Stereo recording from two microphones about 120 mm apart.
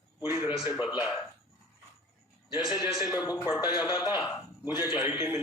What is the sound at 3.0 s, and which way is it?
A man's voice, 30° left (ahead or behind).